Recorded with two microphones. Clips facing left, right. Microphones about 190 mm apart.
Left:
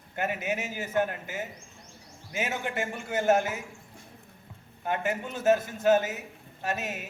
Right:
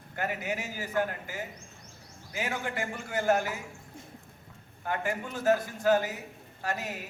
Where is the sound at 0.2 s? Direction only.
20° left (ahead or behind).